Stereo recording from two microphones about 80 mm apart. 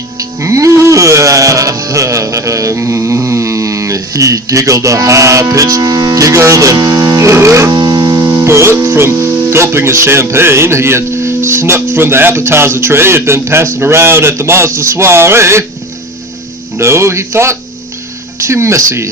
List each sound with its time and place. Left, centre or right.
0.3 s music: right
6.7 s speech: right
7.3 s speech: right
7.7 s music: right
9.4 s speech: right
16.7 s speech: right